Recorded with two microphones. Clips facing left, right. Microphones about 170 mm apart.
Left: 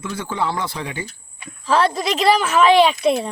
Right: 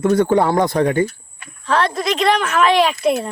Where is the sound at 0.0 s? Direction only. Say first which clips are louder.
Right 10 dB; 60° right (ahead or behind).